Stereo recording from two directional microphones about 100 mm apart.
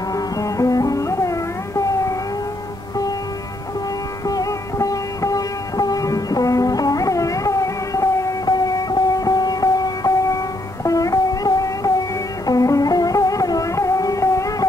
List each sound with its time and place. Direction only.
0.1 s music: 35° left (ahead or behind)
4.3 s music: 35° left (ahead or behind)